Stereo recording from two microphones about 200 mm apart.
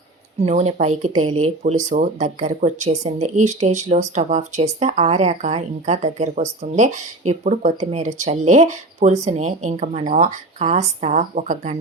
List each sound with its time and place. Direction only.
0.4 s speech: 30° right (ahead or behind)